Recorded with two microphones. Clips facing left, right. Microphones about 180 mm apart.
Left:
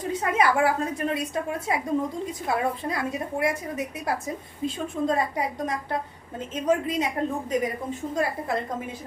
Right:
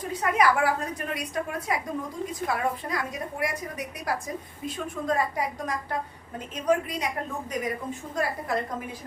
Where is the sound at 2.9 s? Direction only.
25° left (ahead or behind).